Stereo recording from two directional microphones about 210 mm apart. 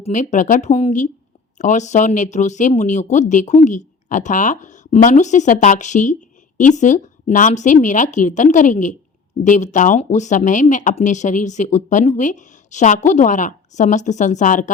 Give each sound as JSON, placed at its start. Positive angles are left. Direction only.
{"t": 0.0, "sound": "speech", "side_deg": 35}